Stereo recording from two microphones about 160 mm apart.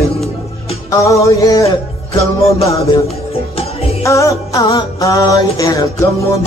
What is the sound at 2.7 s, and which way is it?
Music, 20° left (ahead or behind).